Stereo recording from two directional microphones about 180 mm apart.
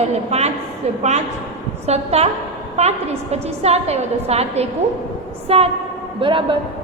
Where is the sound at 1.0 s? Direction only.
40° right (ahead or behind).